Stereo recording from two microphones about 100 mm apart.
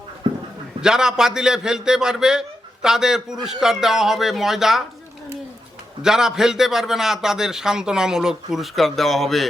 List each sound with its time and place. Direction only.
0.2 s dog: 50° right (ahead or behind)
0.8 s a man's voice: 5° right (ahead or behind)
6.0 s a man's voice: 5° right (ahead or behind)